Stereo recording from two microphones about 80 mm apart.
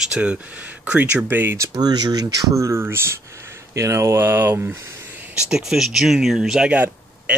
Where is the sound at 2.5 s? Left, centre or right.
Right.